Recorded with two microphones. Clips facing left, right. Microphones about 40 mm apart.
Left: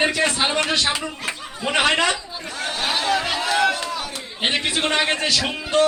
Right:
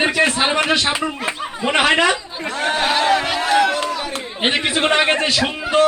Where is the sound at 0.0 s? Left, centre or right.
Centre.